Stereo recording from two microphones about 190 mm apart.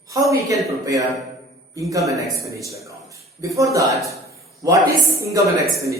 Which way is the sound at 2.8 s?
15° right (ahead or behind).